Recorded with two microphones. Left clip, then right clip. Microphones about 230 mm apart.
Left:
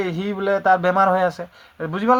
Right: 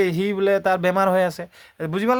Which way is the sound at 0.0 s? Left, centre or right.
Right.